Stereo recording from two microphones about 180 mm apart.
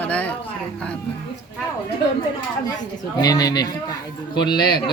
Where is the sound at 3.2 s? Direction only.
20° left (ahead or behind).